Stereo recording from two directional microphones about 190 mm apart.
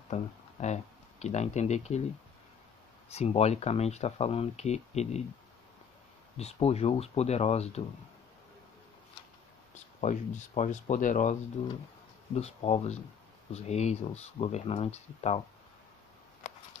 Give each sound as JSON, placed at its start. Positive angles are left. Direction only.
{"t": 0.1, "sound": "speech", "side_deg": 40}
{"t": 3.1, "sound": "speech", "side_deg": 35}
{"t": 6.3, "sound": "speech", "side_deg": 35}
{"t": 9.8, "sound": "speech", "side_deg": 35}
{"t": 11.6, "sound": "speech", "side_deg": 30}